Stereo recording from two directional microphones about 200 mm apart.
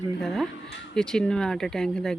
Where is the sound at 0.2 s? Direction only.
Centre (ahead or behind).